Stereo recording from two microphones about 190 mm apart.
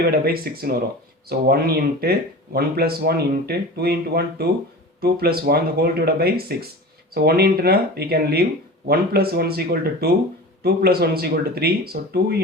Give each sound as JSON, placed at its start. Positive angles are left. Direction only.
{"t": 0.0, "sound": "speech", "side_deg": -55}